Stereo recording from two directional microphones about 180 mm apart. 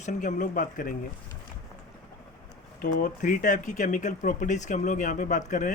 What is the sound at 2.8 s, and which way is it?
Speech, 50° left (ahead or behind).